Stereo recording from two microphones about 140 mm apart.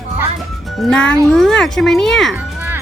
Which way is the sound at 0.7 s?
5° left (ahead or behind).